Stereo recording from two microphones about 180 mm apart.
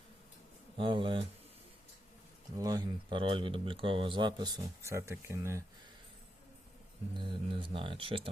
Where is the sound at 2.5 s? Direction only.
20° right (ahead or behind).